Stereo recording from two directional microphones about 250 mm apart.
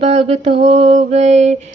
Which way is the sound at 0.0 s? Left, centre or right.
Right.